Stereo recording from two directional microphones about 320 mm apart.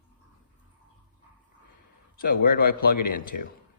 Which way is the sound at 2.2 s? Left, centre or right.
Left.